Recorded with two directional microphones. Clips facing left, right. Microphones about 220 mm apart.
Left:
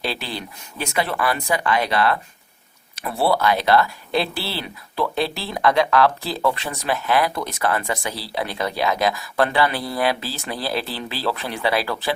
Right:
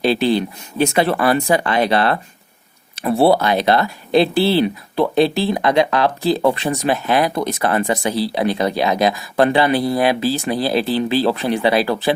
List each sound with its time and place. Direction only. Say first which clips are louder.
0.0 s speech: right 12 dB; 20° right (ahead or behind)